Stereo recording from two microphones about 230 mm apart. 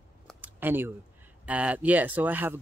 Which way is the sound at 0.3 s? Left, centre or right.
Centre.